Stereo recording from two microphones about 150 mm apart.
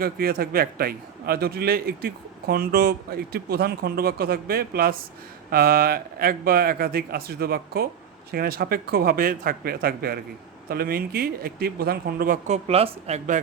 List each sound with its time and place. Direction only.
0.0 s a man's voice: 80° right
12.5 s speech: 45° right (ahead or behind)